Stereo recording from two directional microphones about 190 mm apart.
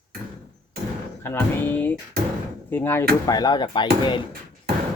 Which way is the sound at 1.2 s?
10° left (ahead or behind).